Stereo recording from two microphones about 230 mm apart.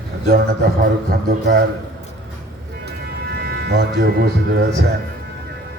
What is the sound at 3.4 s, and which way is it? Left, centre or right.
Speech, right.